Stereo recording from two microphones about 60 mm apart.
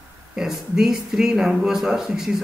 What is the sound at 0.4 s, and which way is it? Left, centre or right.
Speech, centre.